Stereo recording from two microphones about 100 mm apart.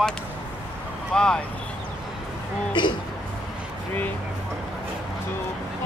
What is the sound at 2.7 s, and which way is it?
Speech, 50° left (ahead or behind).